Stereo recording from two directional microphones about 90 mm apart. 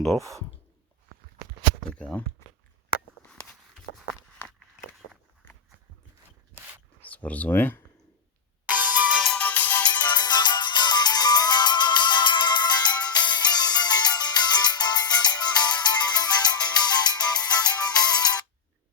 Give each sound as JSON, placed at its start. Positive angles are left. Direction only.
{"t": 0.2, "sound": "speech", "side_deg": -35}
{"t": 1.9, "sound": "speech", "side_deg": 15}
{"t": 7.1, "sound": "speech", "side_deg": 15}
{"t": 8.6, "sound": "music", "side_deg": -20}
{"t": 9.4, "sound": "music", "side_deg": 20}
{"t": 10.1, "sound": "music", "side_deg": 50}